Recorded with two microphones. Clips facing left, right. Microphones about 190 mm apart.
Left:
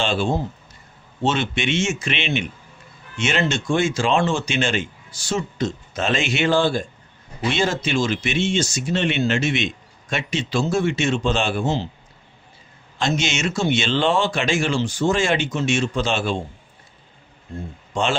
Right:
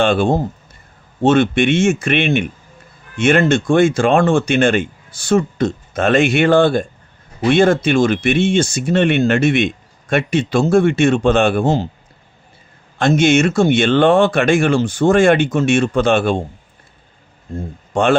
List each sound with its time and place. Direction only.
0.0 s speech: 55° right (ahead or behind)
13.0 s speech: 55° right (ahead or behind)
17.9 s a man's voice: 55° right (ahead or behind)